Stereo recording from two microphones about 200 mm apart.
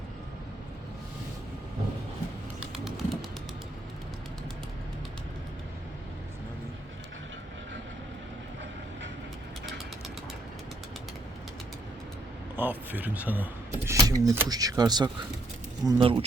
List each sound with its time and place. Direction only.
2.6 s pigeon: 5° right (ahead or behind)
12.5 s speech: 10° right (ahead or behind); by 16.2 s 25° right (ahead or behind)